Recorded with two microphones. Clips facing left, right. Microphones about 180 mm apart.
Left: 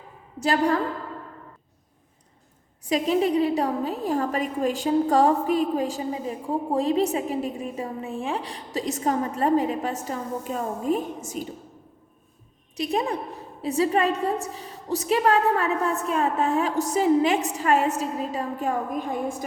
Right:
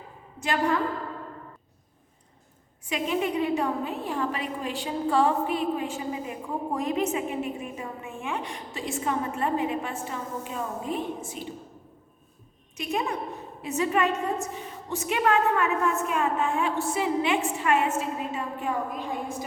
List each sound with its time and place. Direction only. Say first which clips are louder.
0.4 s a woman's voice: left 4 dB; 35° left (ahead or behind)
2.8 s a woman's voice: left 5 dB; 35° left (ahead or behind)
12.7 s a woman's voice: left 4 dB; 35° left (ahead or behind)